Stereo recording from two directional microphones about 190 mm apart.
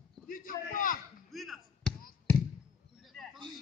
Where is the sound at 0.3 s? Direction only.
45° left (ahead or behind).